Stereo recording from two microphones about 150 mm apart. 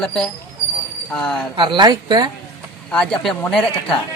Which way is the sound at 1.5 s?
35° right (ahead or behind).